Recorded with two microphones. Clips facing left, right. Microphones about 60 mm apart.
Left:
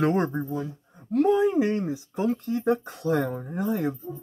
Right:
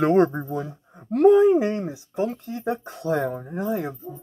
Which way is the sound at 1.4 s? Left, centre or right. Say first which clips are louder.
Right 4 dB; right.